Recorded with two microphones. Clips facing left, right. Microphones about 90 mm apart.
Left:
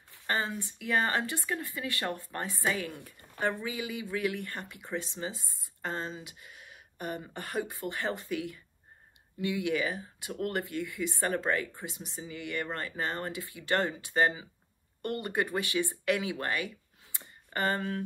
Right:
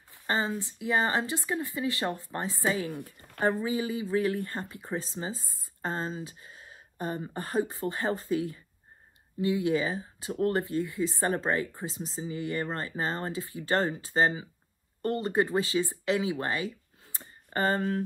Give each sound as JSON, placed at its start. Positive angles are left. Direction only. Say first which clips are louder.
{"t": 0.3, "sound": "speech", "louder": "right 3 dB", "side_deg": -20}
{"t": 3.6, "sound": "speech", "louder": "right 6 dB", "side_deg": -30}
{"t": 17.1, "sound": "a sound", "louder": "right 3 dB", "side_deg": -30}